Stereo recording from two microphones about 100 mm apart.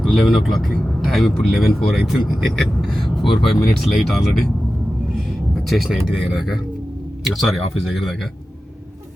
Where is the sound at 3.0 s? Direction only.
50° left (ahead or behind).